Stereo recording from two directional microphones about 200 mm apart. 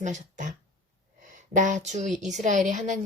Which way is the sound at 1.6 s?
40° right (ahead or behind).